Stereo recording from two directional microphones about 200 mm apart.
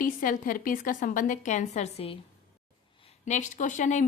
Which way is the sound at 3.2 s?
35° left (ahead or behind).